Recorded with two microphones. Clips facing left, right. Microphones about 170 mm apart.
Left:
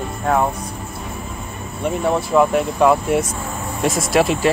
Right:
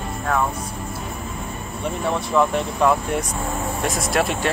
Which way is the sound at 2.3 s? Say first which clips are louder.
Left 3 dB; 10° left (ahead or behind).